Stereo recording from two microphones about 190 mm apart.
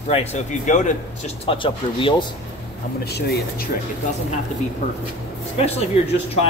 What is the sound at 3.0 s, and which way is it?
Speech, 55° left (ahead or behind).